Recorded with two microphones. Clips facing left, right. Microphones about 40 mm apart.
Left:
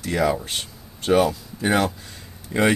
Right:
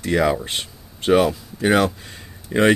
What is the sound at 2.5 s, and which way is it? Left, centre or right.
Speech, right.